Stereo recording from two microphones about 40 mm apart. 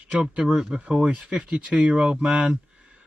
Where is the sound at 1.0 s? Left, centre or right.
Right.